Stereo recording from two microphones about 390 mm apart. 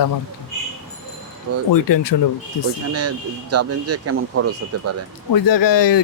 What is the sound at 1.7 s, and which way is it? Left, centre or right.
Speech, left.